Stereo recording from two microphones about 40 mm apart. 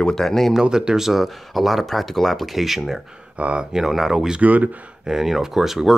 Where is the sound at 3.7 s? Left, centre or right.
Centre.